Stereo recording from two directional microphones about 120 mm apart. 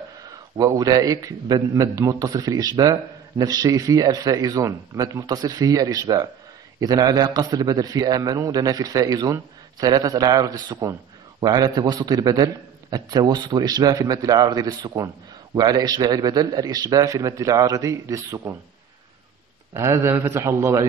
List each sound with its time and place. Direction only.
0.3 s a man's voice: 30° right (ahead or behind)
19.7 s a man's voice: 25° right (ahead or behind)